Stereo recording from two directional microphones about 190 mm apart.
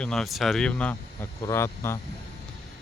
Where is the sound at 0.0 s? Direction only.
Centre (ahead or behind).